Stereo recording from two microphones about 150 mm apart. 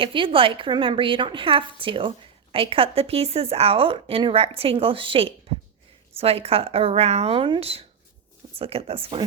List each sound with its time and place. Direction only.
0.0 s a woman's voice: 35° right (ahead or behind)